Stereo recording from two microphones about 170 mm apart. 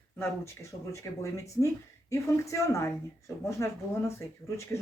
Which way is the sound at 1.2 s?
20° left (ahead or behind).